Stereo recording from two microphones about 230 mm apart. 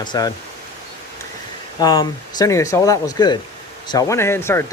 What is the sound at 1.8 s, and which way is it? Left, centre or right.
Speech, centre.